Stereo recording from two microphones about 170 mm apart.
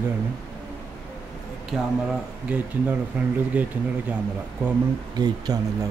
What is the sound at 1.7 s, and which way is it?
Speech, centre (ahead or behind).